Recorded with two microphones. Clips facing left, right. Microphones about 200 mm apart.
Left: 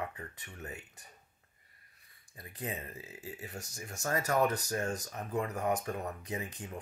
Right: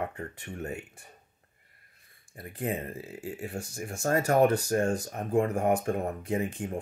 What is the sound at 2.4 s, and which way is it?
Speech, 55° right (ahead or behind).